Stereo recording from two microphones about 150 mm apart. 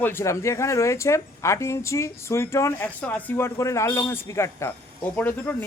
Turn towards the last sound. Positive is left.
turn(degrees=10)  # may be behind; listen again after turning